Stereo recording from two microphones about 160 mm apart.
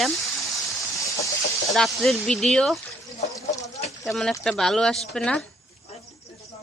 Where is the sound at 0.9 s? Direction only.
20° left (ahead or behind).